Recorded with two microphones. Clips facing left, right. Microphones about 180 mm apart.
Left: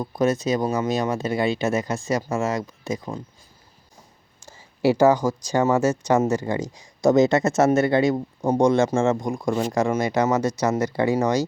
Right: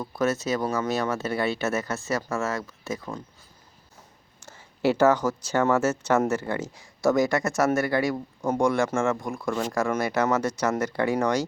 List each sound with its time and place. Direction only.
0.0 s speech: 15° left (ahead or behind)
4.4 s speech: 10° left (ahead or behind)